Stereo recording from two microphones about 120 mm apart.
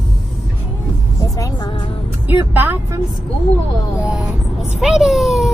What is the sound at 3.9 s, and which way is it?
Speech, 10° right (ahead or behind).